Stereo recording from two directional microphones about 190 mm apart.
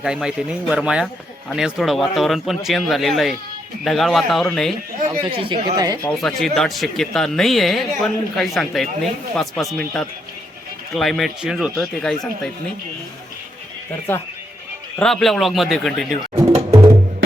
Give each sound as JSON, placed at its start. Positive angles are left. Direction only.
{"t": 0.0, "sound": "speech", "side_deg": -5}
{"t": 5.3, "sound": "speech", "side_deg": -25}
{"t": 6.0, "sound": "speech", "side_deg": 5}
{"t": 14.1, "sound": "speech", "side_deg": 10}
{"t": 16.6, "sound": "music", "side_deg": -30}